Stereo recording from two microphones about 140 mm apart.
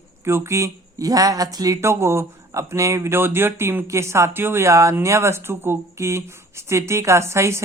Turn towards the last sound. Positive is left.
turn(degrees=-20)  # may be behind; listen again after turning